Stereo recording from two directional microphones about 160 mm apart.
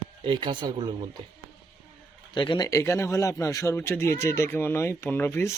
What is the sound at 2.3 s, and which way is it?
Speech, 30° left (ahead or behind).